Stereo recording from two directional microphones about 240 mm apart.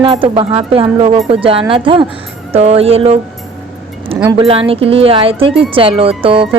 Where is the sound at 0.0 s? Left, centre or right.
Right.